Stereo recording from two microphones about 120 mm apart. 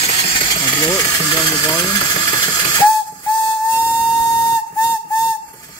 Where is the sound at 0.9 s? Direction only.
30° left (ahead or behind).